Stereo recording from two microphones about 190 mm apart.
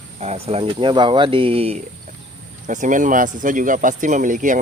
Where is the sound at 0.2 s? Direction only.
35° right (ahead or behind).